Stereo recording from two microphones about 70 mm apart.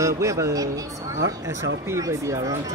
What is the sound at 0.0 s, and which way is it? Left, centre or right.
Speech, right.